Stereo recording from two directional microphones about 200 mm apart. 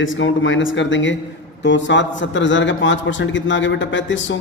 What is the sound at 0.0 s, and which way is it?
A man's voice, 70° left (ahead or behind).